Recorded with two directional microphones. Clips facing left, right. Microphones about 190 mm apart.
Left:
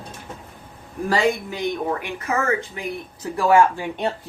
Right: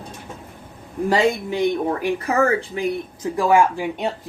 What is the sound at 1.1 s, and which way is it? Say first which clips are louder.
Speech: right 2 dB; 25° right (ahead or behind).